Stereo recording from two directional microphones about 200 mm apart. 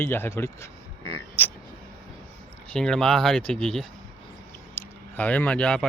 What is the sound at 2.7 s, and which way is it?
Speech, 5° left (ahead or behind).